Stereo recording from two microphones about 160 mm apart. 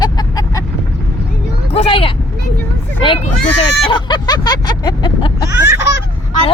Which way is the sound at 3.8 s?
30° left (ahead or behind).